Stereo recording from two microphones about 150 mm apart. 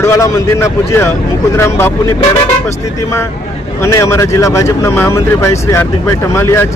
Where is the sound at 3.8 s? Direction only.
20° left (ahead or behind).